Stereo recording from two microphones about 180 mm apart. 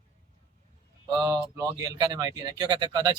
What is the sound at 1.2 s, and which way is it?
Speech, 20° right (ahead or behind).